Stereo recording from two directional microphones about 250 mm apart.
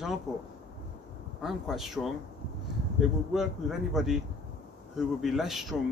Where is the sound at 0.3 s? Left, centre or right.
Centre.